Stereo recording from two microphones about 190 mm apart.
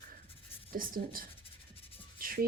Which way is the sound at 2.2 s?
50° right (ahead or behind).